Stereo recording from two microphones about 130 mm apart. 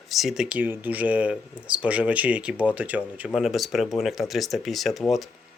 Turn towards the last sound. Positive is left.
turn(degrees=0)  # may be behind; listen again after turning